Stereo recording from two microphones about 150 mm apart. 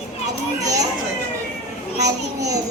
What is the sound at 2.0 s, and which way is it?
Speech, 25° right (ahead or behind).